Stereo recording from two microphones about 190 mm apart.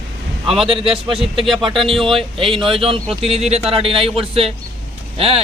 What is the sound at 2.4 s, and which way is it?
A man's voice, 30° right (ahead or behind).